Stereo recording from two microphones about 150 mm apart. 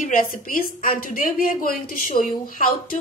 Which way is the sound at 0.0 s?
65° left (ahead or behind).